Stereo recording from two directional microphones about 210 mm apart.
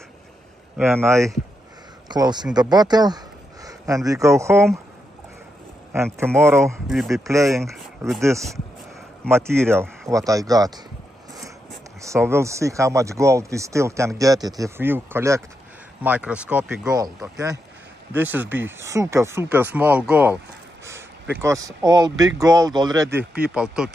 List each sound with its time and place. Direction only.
0.7 s speech: 10° right (ahead or behind)
6.4 s speech: 10° right (ahead or behind)
6.9 s speech: centre (ahead or behind)
8.2 s speech: 15° right (ahead or behind)
9.7 s speech: 15° right (ahead or behind)
12.0 s speech: 15° right (ahead or behind)
16.8 s speech: 15° right (ahead or behind)